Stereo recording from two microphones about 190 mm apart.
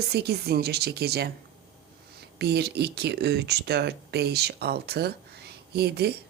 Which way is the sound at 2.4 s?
60° right (ahead or behind).